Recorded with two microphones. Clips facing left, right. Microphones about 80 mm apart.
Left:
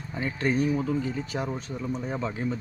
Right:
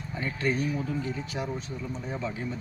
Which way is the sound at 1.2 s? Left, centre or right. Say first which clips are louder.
Left 2 dB; left.